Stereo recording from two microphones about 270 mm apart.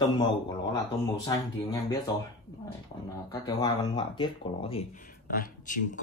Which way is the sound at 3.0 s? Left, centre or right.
Centre.